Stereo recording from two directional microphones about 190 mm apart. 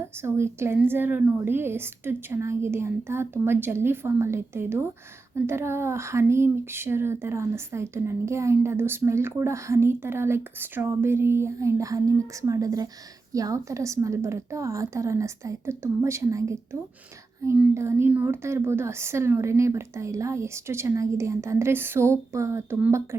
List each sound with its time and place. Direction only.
0.2 s speech: 15° right (ahead or behind)